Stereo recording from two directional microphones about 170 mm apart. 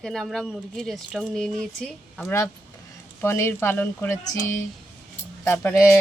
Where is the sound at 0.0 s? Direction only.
Centre (ahead or behind).